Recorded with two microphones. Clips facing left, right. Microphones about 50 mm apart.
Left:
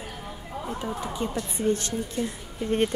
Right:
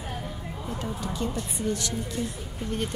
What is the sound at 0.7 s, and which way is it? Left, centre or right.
Speech, centre.